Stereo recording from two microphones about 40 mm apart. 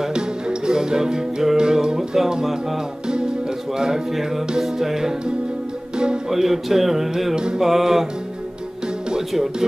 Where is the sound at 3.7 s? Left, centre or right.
Centre.